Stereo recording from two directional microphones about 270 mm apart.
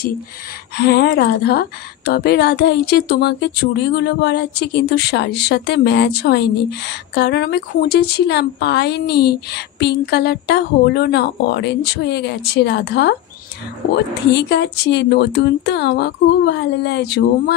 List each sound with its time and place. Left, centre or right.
0.7 s speech: left
14.3 s speech: left